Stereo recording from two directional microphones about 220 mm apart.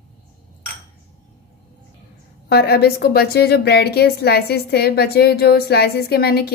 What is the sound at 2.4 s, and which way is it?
A woman's voice, 45° left (ahead or behind).